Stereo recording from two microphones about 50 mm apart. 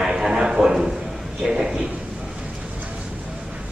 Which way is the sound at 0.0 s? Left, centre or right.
Centre.